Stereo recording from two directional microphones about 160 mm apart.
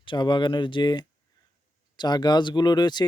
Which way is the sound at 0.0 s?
30° left (ahead or behind).